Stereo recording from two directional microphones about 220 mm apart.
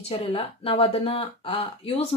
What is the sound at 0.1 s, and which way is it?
Speech, 25° left (ahead or behind).